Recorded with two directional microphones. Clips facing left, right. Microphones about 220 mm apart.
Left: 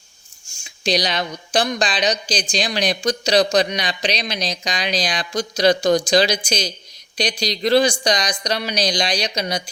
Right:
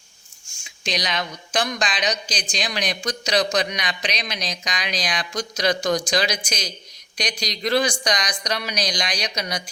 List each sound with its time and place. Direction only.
0.6 s speech: 35° left (ahead or behind)